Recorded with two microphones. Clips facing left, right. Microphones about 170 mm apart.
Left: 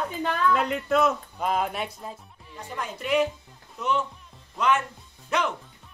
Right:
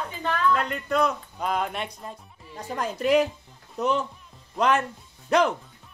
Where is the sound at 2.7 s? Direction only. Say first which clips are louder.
Right 5 dB; 40° right (ahead or behind).